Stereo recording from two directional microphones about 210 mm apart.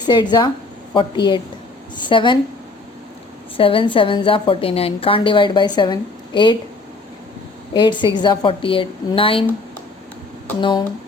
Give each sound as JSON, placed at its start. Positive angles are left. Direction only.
{"t": 0.0, "sound": "a woman's voice", "side_deg": 20}
{"t": 3.6, "sound": "a woman's voice", "side_deg": 25}
{"t": 7.7, "sound": "a woman's voice", "side_deg": 20}
{"t": 10.6, "sound": "a woman's voice", "side_deg": 20}